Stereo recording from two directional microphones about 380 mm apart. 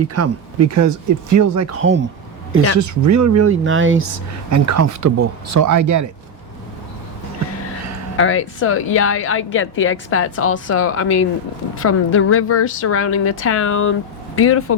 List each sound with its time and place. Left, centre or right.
0.1 s speech: right
2.8 s speech: right
4.5 s speech: right
8.1 s a woman's voice: left